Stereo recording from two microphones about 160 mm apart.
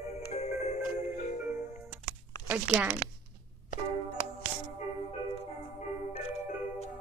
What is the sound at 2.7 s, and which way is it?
Speech, 20° right (ahead or behind).